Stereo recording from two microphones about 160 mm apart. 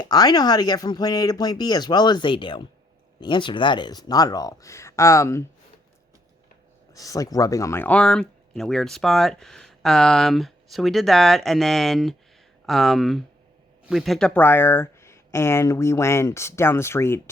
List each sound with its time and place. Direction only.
0.0 s speech: 25° left (ahead or behind)
6.9 s speech: 20° left (ahead or behind)